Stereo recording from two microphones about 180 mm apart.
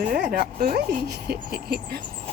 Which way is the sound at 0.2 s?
60° right (ahead or behind).